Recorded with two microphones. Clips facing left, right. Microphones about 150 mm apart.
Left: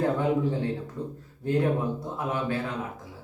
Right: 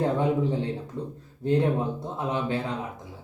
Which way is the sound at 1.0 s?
20° right (ahead or behind).